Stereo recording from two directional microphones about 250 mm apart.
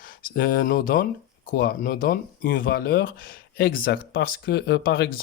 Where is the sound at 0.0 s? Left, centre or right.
Left.